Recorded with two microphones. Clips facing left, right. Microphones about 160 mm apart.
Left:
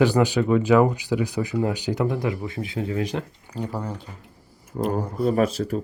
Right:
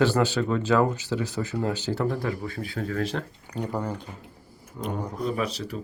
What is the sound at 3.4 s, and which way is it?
Speech, centre (ahead or behind).